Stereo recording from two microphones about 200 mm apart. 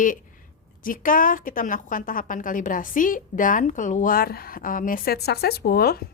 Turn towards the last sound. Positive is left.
turn(degrees=50)  # may be behind; listen again after turning